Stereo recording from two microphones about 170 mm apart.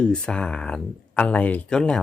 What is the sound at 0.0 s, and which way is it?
Speech, 5° left (ahead or behind).